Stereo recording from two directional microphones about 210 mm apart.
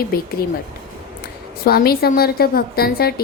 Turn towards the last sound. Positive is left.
turn(degrees=45)  # may be behind; listen again after turning